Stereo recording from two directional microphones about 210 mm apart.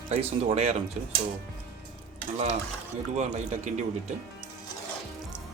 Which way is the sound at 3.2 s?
35° right (ahead or behind).